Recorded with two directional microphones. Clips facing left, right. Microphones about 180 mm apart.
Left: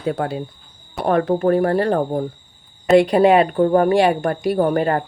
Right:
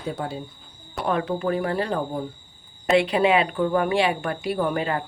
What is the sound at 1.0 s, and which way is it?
Speech, 50° left (ahead or behind).